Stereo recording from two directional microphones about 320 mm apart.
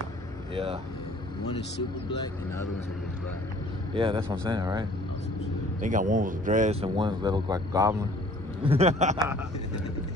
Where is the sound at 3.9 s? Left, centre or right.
Centre.